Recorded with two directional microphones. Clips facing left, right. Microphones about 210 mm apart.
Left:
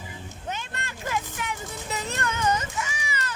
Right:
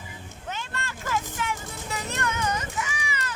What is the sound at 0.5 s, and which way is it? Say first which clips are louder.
Vehicle: right 4 dB; 20° left (ahead or behind).